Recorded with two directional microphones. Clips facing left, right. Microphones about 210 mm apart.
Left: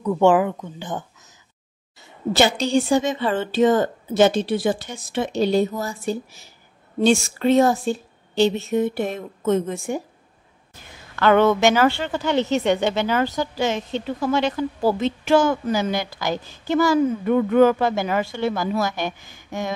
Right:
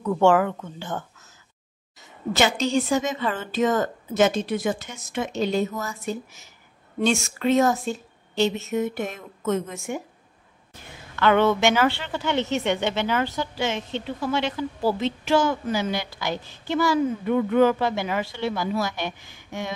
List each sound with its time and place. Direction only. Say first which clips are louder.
0.0 s a woman's voice: left 2 dB; 15° left (ahead or behind)
2.0 s a woman's voice: left 4 dB; 30° left (ahead or behind)
11.1 s a woman's voice: left 3 dB; 40° left (ahead or behind)